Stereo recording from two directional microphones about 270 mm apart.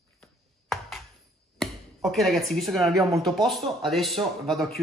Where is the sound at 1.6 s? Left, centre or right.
Centre.